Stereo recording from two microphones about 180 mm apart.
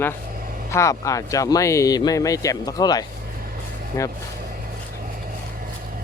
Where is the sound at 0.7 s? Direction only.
15° left (ahead or behind).